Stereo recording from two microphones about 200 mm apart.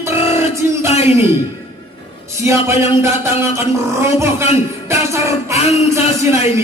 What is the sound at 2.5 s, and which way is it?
A man's voice, 15° right (ahead or behind).